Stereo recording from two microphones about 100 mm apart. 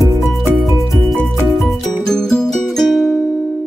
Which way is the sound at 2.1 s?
5° left (ahead or behind).